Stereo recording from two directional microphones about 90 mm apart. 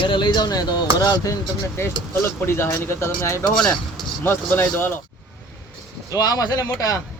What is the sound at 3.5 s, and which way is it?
Speech, 5° left (ahead or behind).